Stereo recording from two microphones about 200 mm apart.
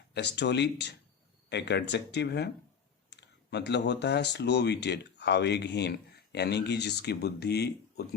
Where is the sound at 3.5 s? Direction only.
60° left (ahead or behind).